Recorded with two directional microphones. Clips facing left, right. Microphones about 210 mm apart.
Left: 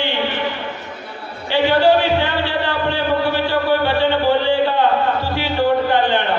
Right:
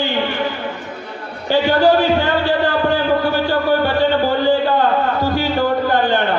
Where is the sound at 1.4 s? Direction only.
45° right (ahead or behind).